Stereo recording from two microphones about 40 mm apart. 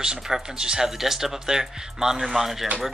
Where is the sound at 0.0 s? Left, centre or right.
Centre.